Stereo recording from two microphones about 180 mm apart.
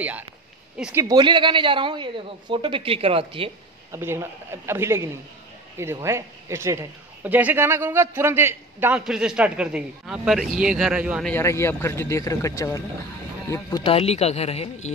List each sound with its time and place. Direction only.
0.7 s speech: 5° right (ahead or behind)
1.0 s speech: 25° right (ahead or behind)
3.9 s a man's voice: 15° right (ahead or behind)
11.2 s speech: 15° left (ahead or behind)
13.8 s speech: 35° left (ahead or behind)